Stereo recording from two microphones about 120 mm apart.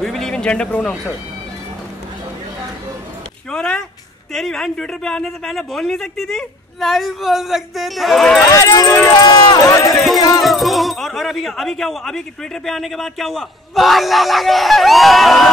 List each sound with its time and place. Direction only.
0.0 s music: 5° left (ahead or behind)
3.5 s a man's voice: 5° left (ahead or behind)
8.5 s speech: 30° left (ahead or behind)
9.2 s run: 35° left (ahead or behind)
9.8 s a sound: centre (ahead or behind)
10.4 s a man's voice: centre (ahead or behind)